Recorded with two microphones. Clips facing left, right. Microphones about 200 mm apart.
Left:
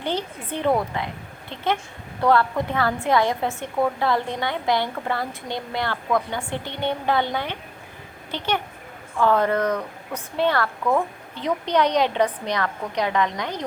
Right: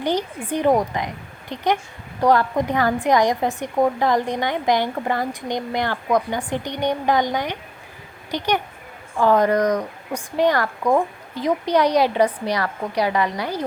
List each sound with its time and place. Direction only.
0.0 s a woman's voice: 15° right (ahead or behind)